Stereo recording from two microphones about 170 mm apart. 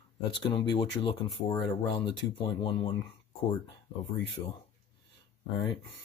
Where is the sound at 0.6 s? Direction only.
30° left (ahead or behind).